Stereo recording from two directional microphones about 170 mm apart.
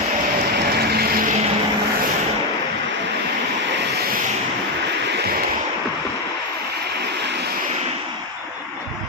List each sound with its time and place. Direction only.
0.8 s vehicle: 65° right (ahead or behind)